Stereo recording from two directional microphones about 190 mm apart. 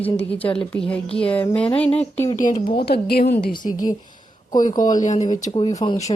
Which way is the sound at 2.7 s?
55° left (ahead or behind).